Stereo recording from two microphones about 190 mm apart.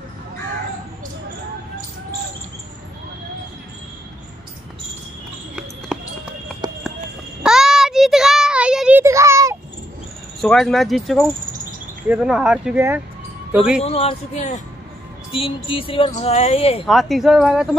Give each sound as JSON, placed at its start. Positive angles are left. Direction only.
{"t": 5.6, "sound": "basketball bounce", "side_deg": -5}
{"t": 6.6, "sound": "clip-clop", "side_deg": -20}
{"t": 7.4, "sound": "child singing", "side_deg": 0}
{"t": 10.4, "sound": "speech", "side_deg": 5}
{"t": 13.8, "sound": "speech", "side_deg": 30}
{"t": 16.8, "sound": "speech", "side_deg": 0}